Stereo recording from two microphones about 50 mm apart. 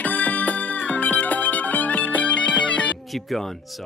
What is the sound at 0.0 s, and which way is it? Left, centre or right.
Music, left.